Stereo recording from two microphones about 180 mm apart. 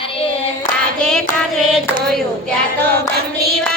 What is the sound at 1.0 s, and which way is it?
Hands, 5° left (ahead or behind).